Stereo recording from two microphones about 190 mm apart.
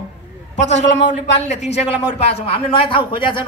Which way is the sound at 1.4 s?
35° left (ahead or behind).